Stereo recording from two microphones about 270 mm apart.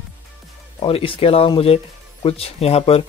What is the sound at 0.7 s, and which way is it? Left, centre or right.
Speech, centre.